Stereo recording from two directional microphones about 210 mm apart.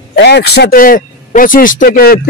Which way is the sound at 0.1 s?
50° left (ahead or behind).